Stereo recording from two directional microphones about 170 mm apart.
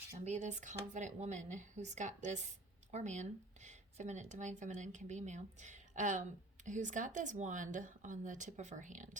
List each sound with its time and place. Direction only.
0.3 s speech: 45° right (ahead or behind)